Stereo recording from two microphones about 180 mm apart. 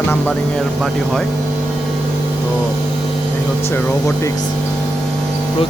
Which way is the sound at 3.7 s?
15° left (ahead or behind).